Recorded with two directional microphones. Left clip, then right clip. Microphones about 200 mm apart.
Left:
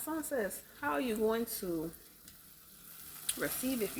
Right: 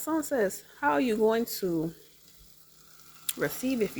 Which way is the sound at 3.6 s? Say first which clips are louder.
Right 5 dB; 35° right (ahead or behind).